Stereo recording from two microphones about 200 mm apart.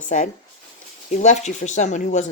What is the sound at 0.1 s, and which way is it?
Speech, 35° left (ahead or behind).